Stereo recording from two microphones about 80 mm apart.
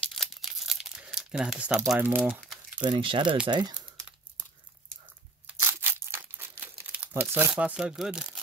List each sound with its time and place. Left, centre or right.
0.1 s crumpling: centre
2.0 s speech: right
2.8 s speech: right
3.4 s speech: right
5.6 s crumpling: right
7.5 s speech: centre